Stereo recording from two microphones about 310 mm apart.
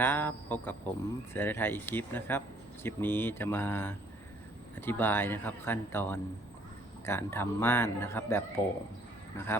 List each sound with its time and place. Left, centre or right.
0.0 s speech: centre